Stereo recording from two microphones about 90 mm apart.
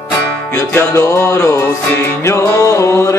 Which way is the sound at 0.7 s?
35° left (ahead or behind).